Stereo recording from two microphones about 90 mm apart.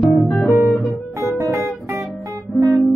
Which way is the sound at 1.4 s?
35° right (ahead or behind).